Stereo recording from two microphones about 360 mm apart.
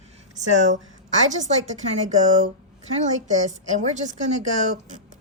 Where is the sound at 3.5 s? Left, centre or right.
Centre.